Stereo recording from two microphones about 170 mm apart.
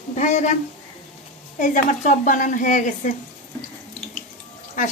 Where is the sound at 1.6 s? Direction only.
50° left (ahead or behind).